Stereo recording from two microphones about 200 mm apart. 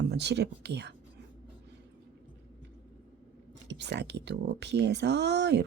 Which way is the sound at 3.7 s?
60° right (ahead or behind).